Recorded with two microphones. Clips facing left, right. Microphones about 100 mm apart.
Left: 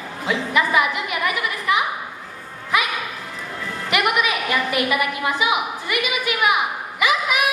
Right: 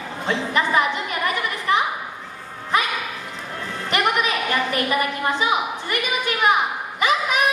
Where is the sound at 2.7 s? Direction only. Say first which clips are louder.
Even; 35° right (ahead or behind).